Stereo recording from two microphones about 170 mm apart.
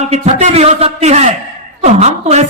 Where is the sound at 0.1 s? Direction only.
40° right (ahead or behind).